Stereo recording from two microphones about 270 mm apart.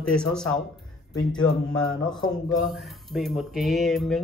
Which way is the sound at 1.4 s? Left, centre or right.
Centre.